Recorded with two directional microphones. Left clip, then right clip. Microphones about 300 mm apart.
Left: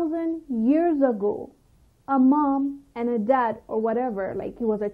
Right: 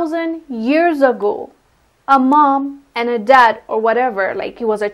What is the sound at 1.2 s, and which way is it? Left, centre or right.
Speech, right.